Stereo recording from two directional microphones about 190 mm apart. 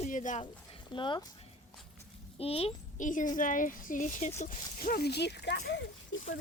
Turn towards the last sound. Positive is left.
turn(degrees=65)  # may be behind; listen again after turning